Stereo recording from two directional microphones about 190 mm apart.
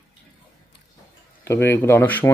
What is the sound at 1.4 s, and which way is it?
Speech, 10° left (ahead or behind).